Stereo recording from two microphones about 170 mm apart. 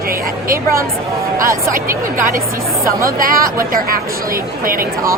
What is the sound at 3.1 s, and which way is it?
Speech, 55° right (ahead or behind).